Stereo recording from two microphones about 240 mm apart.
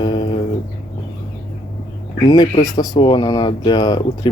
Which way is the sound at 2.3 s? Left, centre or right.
Centre.